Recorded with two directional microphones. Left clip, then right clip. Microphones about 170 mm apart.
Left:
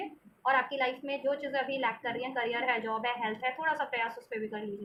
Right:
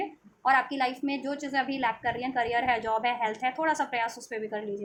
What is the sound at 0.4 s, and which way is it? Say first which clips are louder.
A woman's voice: right 4 dB; 55° right (ahead or behind).